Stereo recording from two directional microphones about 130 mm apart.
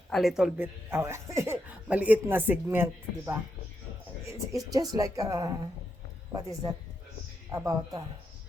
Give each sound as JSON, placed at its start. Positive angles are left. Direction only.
{"t": 0.1, "sound": "speech", "side_deg": 0}
{"t": 0.5, "sound": "speech", "side_deg": -20}